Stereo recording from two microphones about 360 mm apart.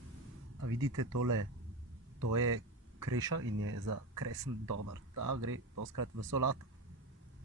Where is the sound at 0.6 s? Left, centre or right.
Right.